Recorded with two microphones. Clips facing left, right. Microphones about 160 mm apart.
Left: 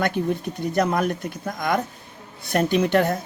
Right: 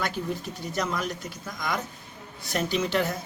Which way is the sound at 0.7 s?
55° left (ahead or behind).